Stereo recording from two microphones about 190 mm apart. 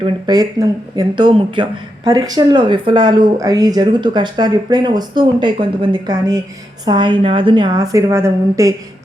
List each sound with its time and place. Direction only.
0.0 s speech: 20° right (ahead or behind)